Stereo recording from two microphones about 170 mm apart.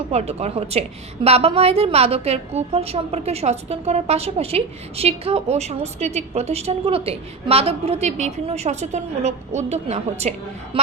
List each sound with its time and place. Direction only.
0.1 s a woman's voice: 40° right (ahead or behind)